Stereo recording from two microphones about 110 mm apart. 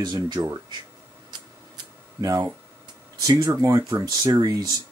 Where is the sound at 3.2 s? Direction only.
30° right (ahead or behind).